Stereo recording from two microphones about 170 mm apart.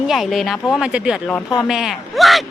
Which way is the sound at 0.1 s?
Centre (ahead or behind).